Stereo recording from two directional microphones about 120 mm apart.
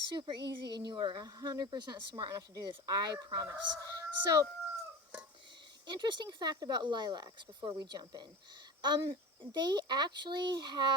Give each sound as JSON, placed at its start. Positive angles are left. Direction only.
{"t": 0.1, "sound": "a woman's voice", "side_deg": -40}
{"t": 5.8, "sound": "a woman's voice", "side_deg": -40}